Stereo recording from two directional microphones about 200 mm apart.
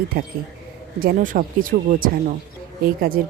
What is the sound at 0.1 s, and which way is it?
Speech, 50° right (ahead or behind).